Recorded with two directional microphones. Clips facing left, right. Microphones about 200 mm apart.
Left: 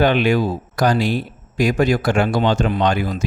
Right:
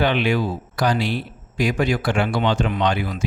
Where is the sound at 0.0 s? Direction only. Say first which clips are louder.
Left 4 dB; 45° left (ahead or behind).